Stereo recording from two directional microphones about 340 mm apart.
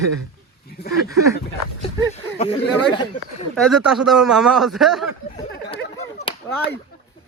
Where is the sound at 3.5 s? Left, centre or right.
Centre.